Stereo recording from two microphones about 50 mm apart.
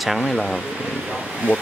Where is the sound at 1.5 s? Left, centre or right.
Right.